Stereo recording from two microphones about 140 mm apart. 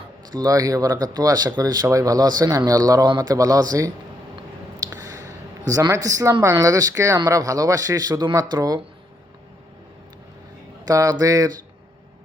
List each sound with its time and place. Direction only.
0.3 s speech: 25° right (ahead or behind)
5.6 s speech: 25° right (ahead or behind)
10.8 s speech: 25° right (ahead or behind)